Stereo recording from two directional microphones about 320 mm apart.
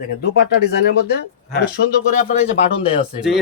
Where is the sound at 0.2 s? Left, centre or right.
Left.